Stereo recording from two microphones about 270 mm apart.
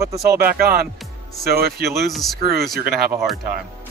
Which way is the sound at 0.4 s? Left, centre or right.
Right.